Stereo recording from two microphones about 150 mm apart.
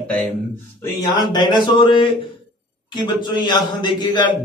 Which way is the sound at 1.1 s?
30° left (ahead or behind).